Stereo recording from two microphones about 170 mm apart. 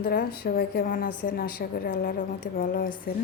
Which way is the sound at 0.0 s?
70° left (ahead or behind).